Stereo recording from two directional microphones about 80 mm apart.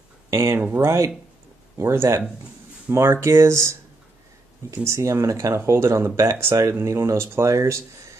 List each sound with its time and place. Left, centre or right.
0.3 s speech: right
4.8 s speech: right